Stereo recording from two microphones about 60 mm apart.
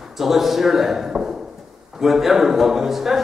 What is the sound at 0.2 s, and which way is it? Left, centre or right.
A man's voice, centre.